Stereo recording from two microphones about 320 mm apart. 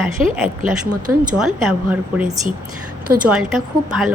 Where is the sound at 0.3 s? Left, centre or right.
Centre.